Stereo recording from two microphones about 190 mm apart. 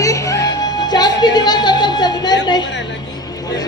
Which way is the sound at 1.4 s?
20° left (ahead or behind).